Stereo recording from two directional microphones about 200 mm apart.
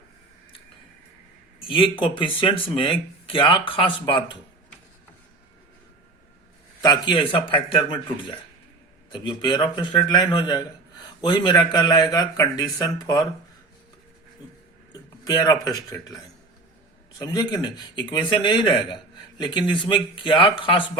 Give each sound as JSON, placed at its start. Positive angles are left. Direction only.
{"t": 1.6, "sound": "a man's voice", "side_deg": 25}
{"t": 6.8, "sound": "a man's voice", "side_deg": 20}
{"t": 9.0, "sound": "a man's voice", "side_deg": 20}
{"t": 14.9, "sound": "a sound", "side_deg": 20}
{"t": 15.6, "sound": "a man's voice", "side_deg": 20}